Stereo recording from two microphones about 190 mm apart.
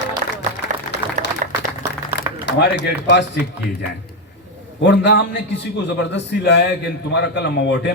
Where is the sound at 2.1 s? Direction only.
65° left (ahead or behind).